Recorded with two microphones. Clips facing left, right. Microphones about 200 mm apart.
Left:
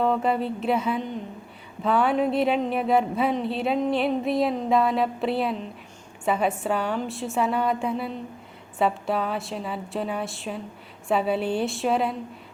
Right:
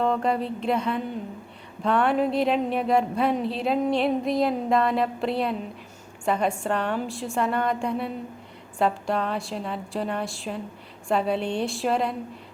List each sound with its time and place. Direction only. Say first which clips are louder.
0.0 s speech: left 1 dB; 5° left (ahead or behind)